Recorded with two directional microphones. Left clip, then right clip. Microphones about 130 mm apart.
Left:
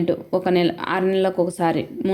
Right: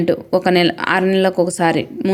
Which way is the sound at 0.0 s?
25° right (ahead or behind).